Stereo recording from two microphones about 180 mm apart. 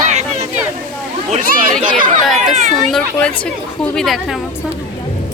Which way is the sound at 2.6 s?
40° right (ahead or behind).